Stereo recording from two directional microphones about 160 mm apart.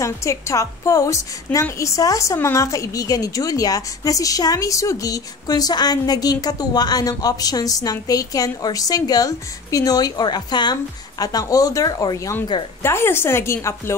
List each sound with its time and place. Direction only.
0.0 s a woman's voice: 20° left (ahead or behind)